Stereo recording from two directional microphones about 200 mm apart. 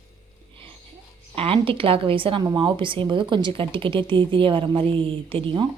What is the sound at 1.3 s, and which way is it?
A woman's voice, 25° right (ahead or behind).